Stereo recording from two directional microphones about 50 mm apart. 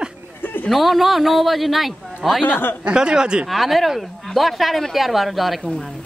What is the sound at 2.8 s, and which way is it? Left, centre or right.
Speech, centre.